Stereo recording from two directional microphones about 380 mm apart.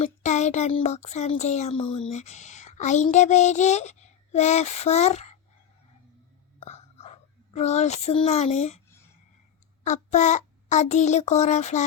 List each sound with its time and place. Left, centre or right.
0.0 s speech: centre
6.6 s whispering: centre
9.8 s speech: centre